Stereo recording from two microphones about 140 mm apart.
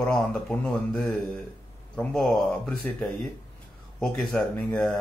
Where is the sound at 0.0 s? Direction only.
5° left (ahead or behind).